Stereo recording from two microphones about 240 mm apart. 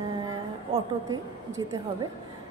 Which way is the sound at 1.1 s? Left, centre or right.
Centre.